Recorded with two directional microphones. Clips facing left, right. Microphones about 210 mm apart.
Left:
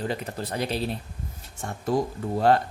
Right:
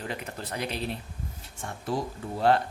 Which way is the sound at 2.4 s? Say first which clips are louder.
Left 3 dB; 40° left (ahead or behind).